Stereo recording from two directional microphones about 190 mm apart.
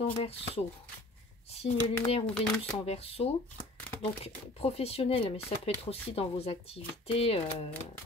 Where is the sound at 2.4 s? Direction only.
5° left (ahead or behind).